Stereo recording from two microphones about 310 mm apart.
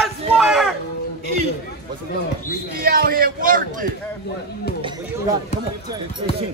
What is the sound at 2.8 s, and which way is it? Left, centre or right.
A man's voice, right.